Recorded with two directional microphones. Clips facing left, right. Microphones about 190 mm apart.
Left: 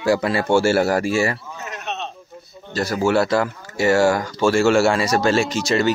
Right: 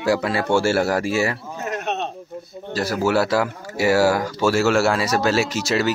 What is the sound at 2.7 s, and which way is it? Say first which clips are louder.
Speech: left 1 dB; 5° right (ahead or behind).